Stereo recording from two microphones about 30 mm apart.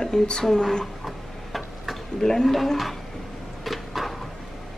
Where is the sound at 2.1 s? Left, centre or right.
Centre.